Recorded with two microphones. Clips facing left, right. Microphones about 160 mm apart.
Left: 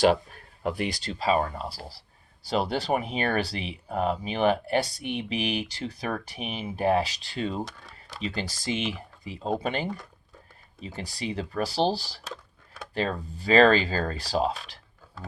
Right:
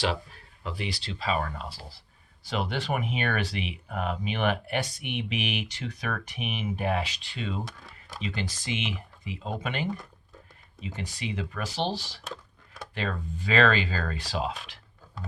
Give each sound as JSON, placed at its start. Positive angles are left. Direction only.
{"t": 0.0, "sound": "speech", "side_deg": 50}